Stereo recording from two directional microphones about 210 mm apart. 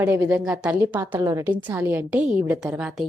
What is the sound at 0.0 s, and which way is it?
A woman's voice, 10° right (ahead or behind).